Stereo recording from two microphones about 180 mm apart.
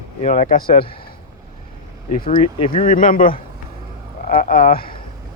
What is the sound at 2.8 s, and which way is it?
Speech, 50° left (ahead or behind).